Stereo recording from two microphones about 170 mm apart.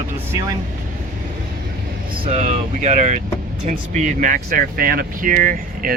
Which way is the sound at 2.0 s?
30° right (ahead or behind).